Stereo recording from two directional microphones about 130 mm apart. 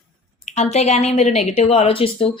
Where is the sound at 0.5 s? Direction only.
55° left (ahead or behind).